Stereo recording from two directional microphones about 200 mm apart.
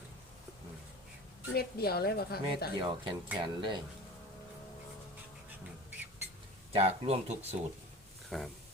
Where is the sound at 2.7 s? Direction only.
25° right (ahead or behind).